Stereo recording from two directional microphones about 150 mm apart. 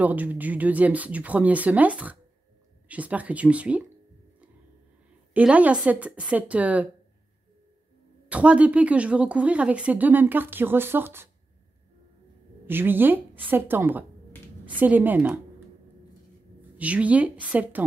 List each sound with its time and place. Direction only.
0.0 s speech: 10° right (ahead or behind)
5.3 s speech: 10° right (ahead or behind)
8.3 s speech: 10° right (ahead or behind)
12.6 s speech: 15° right (ahead or behind)
16.7 s speech: 10° right (ahead or behind)